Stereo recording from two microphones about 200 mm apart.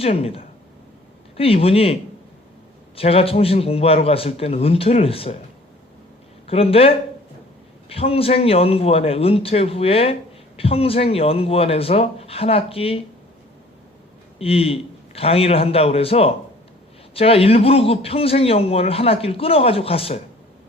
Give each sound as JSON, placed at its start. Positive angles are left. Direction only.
{"t": 0.0, "sound": "speech", "side_deg": 30}
{"t": 6.5, "sound": "speech", "side_deg": 30}
{"t": 14.3, "sound": "speech", "side_deg": 30}